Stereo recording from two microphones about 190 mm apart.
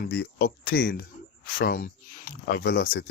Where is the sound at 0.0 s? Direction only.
55° left (ahead or behind).